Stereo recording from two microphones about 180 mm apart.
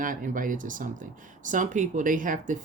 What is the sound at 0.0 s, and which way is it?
Speech, 50° right (ahead or behind).